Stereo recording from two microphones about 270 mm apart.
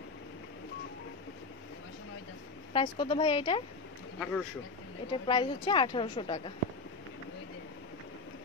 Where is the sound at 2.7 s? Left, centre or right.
Centre.